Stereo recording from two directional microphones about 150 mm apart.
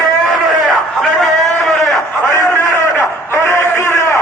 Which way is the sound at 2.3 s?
20° left (ahead or behind).